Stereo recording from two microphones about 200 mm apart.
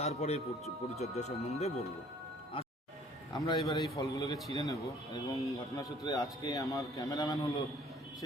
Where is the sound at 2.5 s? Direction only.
25° left (ahead or behind).